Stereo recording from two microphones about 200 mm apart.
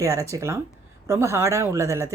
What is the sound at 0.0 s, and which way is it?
Speech, 15° right (ahead or behind).